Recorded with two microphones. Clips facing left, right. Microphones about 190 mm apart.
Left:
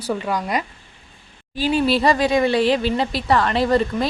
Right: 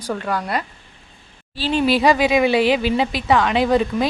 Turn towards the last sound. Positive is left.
turn(degrees=0)  # may be behind; listen again after turning